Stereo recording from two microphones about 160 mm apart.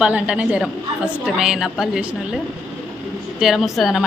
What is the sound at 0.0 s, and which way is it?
A woman's voice, 5° right (ahead or behind).